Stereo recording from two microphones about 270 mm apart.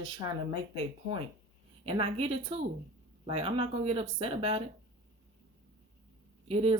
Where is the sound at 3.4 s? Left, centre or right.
Right.